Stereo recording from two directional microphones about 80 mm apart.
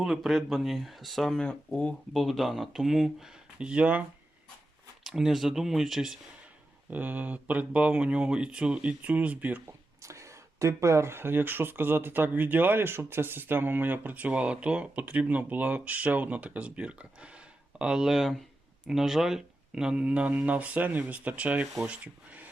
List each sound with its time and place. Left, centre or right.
0.0 s speech: centre
2.1 s speech: centre
5.0 s speech: centre
6.9 s speech: right
10.0 s speech: right; by 22.4 s centre